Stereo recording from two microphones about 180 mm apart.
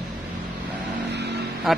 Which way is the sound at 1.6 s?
Centre (ahead or behind).